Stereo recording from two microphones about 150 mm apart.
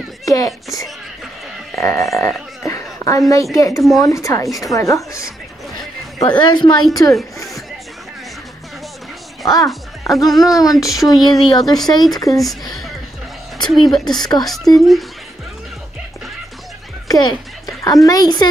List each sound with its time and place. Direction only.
0.2 s speech: 25° left (ahead or behind)
1.8 s a woman's voice: 20° left (ahead or behind)
2.1 s a sound: 20° left (ahead or behind)
3.5 s a woman's voice: 20° left (ahead or behind)
9.7 s speech: centre (ahead or behind)
10.5 s a woman's voice: 25° left (ahead or behind)
11.1 s speech: centre (ahead or behind)
12.1 s a woman's voice: 25° left (ahead or behind)
13.7 s speech: centre (ahead or behind)
14.1 s a woman's voice: 25° left (ahead or behind)
14.4 s speech: centre (ahead or behind)
17.1 s music: 25° left (ahead or behind)
18.0 s a woman's voice: 25° left (ahead or behind)